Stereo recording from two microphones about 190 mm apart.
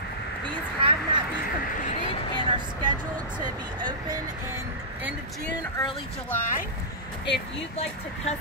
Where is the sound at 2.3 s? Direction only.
25° right (ahead or behind).